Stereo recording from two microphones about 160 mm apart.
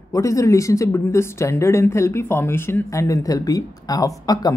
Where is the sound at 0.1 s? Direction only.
20° left (ahead or behind).